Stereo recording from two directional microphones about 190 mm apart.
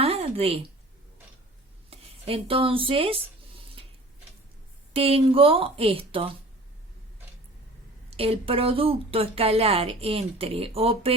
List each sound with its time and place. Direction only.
0.0 s a sound: 30° right (ahead or behind)
1.9 s speech: 30° right (ahead or behind)
4.9 s speech: 30° right (ahead or behind)
8.1 s a woman's voice: 30° right (ahead or behind)